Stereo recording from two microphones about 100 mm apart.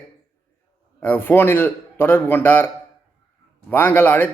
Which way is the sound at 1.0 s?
20° left (ahead or behind).